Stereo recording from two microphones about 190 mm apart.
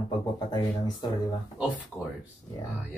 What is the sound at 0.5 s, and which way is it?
Speech, 20° left (ahead or behind).